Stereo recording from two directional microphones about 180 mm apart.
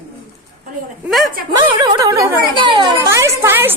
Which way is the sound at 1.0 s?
Centre (ahead or behind).